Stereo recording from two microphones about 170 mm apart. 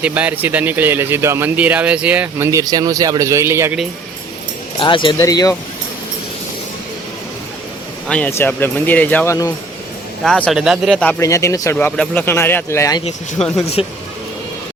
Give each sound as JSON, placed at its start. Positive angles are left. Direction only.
{"t": 0.0, "sound": "speech", "side_deg": -10}
{"t": 4.8, "sound": "speech", "side_deg": 30}
{"t": 5.1, "sound": "speech", "side_deg": 20}
{"t": 8.0, "sound": "speech", "side_deg": 10}
{"t": 10.2, "sound": "speech", "side_deg": 5}
{"t": 11.2, "sound": "speech", "side_deg": 20}
{"t": 13.4, "sound": "speech", "side_deg": 5}
{"t": 13.8, "sound": "speech", "side_deg": 35}